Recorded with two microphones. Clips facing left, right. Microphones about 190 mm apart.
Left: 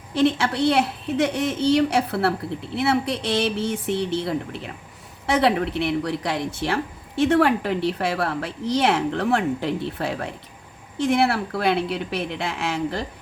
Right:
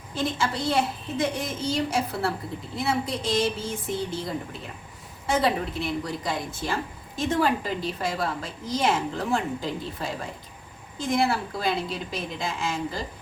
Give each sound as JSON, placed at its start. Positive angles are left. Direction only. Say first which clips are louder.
{"t": 0.1, "sound": "a woman's voice", "louder": "left 7 dB", "side_deg": 70}